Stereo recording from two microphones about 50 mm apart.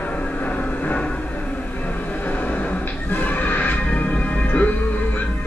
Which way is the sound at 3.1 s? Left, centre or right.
Left.